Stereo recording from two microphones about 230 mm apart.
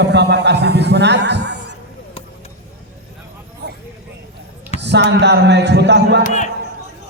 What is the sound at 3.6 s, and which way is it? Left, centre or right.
Vehicle, right.